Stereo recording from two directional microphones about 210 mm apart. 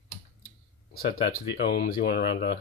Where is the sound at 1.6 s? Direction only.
45° left (ahead or behind).